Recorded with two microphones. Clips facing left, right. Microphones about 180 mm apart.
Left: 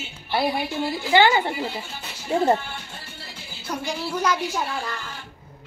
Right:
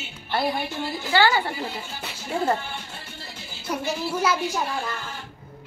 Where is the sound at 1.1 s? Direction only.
20° left (ahead or behind).